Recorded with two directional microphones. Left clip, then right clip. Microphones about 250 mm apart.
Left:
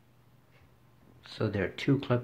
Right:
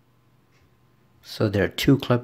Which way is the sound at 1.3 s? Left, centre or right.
Right.